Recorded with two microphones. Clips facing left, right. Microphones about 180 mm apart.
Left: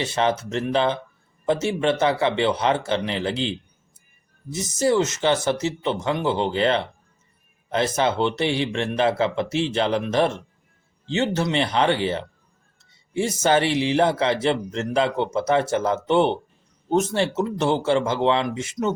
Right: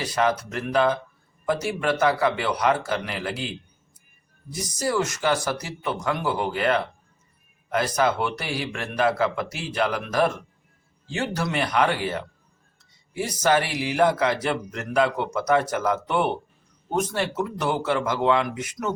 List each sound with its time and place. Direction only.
0.0 s speech: 25° left (ahead or behind)